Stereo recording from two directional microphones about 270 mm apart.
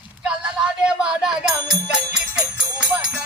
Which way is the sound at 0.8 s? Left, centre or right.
Centre.